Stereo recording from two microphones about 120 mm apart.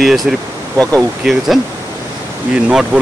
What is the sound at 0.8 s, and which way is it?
Speech, 10° left (ahead or behind).